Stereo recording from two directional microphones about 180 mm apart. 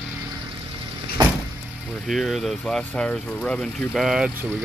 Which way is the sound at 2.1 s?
Centre (ahead or behind).